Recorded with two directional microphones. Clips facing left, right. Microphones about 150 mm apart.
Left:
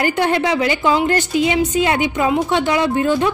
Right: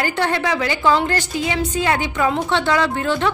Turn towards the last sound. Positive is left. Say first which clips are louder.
# left 3 dB
turn(degrees=15)  # may be behind; listen again after turning